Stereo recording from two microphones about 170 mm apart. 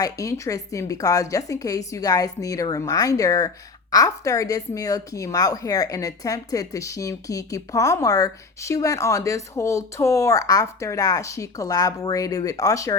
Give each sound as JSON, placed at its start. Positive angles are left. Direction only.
{"t": 0.0, "sound": "speech", "side_deg": 20}